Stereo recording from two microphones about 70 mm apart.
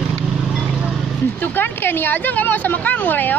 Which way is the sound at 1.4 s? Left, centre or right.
Left.